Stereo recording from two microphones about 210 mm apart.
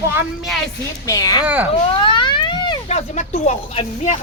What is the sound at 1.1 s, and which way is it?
Speech, 20° left (ahead or behind).